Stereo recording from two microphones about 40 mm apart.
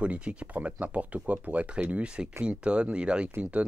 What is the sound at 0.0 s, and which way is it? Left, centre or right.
Speech, right.